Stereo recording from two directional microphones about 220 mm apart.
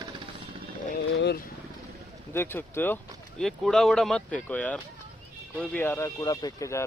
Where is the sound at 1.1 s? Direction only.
50° left (ahead or behind).